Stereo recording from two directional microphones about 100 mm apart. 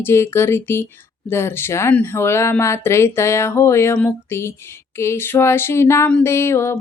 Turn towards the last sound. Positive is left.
turn(degrees=25)  # may be behind; listen again after turning